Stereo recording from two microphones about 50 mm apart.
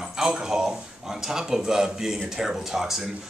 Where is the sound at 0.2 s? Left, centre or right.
Centre.